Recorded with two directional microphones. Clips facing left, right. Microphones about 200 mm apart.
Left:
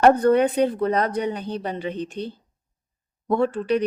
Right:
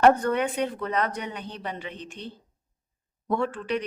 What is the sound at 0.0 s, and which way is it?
Speech, 35° left (ahead or behind).